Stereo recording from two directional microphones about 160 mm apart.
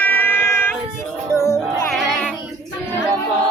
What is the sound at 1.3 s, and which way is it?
Music, 20° left (ahead or behind).